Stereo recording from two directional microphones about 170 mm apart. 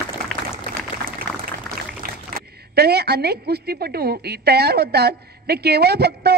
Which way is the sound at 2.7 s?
70° right (ahead or behind).